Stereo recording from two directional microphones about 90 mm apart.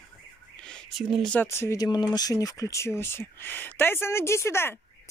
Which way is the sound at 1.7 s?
50° left (ahead or behind).